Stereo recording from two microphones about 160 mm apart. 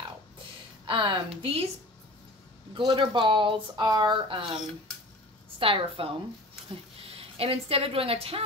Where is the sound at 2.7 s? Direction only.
30° right (ahead or behind).